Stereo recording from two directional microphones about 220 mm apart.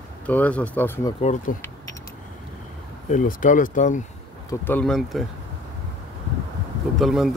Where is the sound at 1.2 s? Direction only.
35° left (ahead or behind).